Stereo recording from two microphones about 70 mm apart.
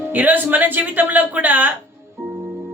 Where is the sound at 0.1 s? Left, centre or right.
Right.